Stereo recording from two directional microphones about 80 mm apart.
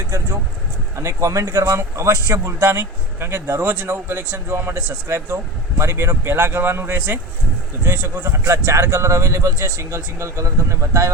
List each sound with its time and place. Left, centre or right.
0.9 s speech: right